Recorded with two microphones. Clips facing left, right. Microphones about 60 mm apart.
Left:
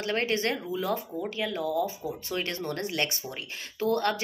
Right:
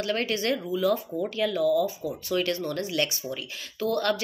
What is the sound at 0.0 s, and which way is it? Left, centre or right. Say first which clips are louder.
Speech: right 1 dB; left.